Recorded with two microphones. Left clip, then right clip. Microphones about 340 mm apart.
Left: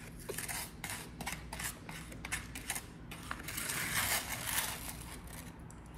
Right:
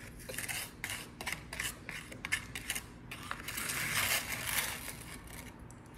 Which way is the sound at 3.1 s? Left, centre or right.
Centre.